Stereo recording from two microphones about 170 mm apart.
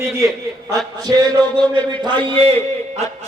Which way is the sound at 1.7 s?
25° right (ahead or behind).